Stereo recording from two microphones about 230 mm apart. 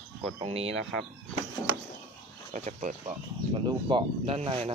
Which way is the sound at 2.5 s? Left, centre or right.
Right.